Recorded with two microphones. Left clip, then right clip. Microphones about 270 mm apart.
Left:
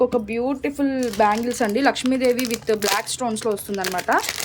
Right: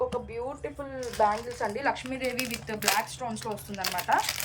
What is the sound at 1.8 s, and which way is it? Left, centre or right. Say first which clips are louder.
A woman's voice: left 13 dB; left.